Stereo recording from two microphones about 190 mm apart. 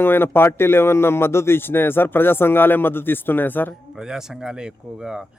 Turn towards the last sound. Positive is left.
turn(degrees=-5)  # may be behind; listen again after turning